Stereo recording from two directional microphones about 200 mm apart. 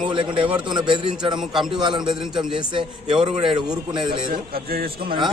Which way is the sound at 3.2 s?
25° right (ahead or behind).